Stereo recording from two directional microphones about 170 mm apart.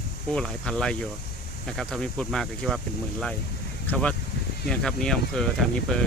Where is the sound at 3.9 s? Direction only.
5° left (ahead or behind).